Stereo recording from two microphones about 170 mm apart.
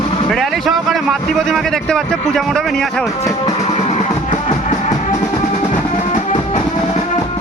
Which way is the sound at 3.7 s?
40° left (ahead or behind).